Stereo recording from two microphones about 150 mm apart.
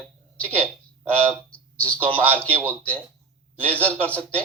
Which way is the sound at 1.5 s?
10° left (ahead or behind).